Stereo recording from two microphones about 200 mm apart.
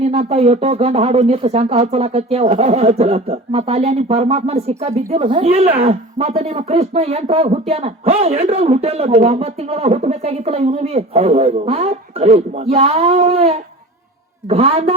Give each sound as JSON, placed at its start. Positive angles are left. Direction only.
{"t": 0.0, "sound": "speech", "side_deg": -30}